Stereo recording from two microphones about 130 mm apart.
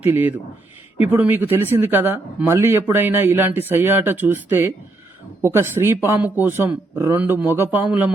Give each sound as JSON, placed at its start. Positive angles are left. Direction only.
{"t": 0.0, "sound": "speech", "side_deg": -15}